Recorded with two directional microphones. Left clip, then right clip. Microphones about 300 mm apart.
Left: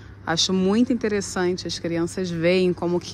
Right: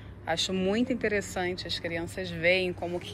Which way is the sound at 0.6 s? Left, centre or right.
Centre.